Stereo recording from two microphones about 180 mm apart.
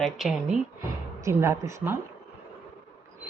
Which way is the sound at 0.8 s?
15° right (ahead or behind).